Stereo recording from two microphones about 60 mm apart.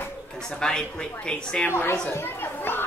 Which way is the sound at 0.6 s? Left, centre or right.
Centre.